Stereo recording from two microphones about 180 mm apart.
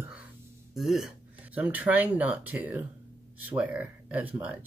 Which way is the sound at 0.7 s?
Centre (ahead or behind).